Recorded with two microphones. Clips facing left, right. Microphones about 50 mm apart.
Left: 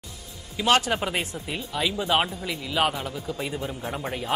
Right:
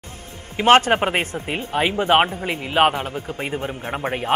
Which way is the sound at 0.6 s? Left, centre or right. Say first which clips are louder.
Right 8 dB; right.